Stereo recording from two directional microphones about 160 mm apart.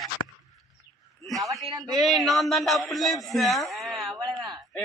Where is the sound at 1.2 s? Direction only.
Centre (ahead or behind).